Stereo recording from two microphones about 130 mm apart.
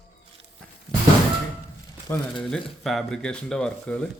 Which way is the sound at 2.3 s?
5° left (ahead or behind).